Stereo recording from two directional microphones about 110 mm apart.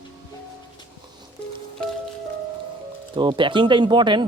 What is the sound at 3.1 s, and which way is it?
Speech, 50° right (ahead or behind).